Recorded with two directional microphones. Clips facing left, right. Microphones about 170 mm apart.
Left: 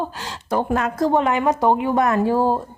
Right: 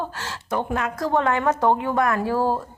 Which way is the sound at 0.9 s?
20° left (ahead or behind).